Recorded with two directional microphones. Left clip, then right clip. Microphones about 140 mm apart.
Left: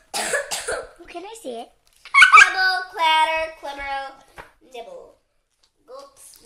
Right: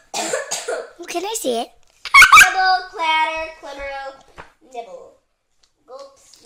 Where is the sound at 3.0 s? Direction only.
15° left (ahead or behind).